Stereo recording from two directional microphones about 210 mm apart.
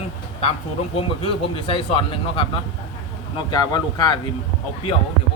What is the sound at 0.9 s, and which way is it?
Speech, 25° left (ahead or behind).